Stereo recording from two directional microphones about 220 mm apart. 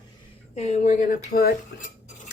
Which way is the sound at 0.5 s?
30° left (ahead or behind).